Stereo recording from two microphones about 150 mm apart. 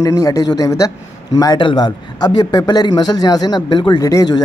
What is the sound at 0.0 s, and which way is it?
A man's voice, 25° left (ahead or behind).